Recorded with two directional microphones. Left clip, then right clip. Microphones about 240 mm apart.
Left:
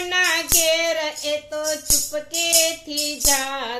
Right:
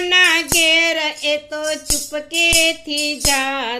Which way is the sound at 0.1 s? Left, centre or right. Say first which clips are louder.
Right 6 dB; right.